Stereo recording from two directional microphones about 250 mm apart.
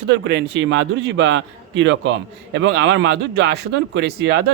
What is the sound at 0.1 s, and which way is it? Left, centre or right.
A man's voice, right.